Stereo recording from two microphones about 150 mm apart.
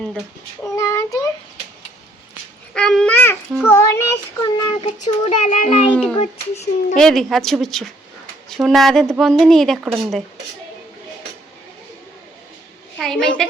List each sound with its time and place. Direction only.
0.6 s child singing: 20° left (ahead or behind)
2.7 s child singing: 5° left (ahead or behind)
4.6 s child singing: 35° left (ahead or behind)
5.4 s a child's voice: 55° left (ahead or behind)
6.9 s a woman's voice: centre (ahead or behind)
13.0 s a woman's voice: 5° left (ahead or behind)